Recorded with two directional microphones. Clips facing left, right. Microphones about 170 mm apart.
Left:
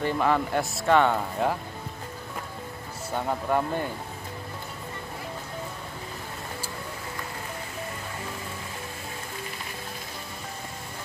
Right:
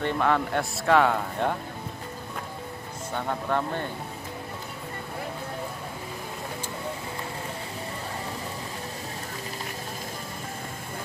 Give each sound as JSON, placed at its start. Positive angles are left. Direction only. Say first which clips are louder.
{"t": 0.0, "sound": "speech", "louder": "even", "side_deg": 5}
{"t": 3.1, "sound": "speech", "louder": "left 2 dB", "side_deg": 10}